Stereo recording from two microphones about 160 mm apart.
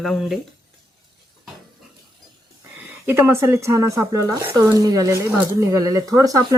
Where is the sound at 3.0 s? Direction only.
15° right (ahead or behind).